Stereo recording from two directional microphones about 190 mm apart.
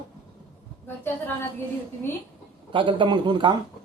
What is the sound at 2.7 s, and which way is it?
Speech, 25° right (ahead or behind).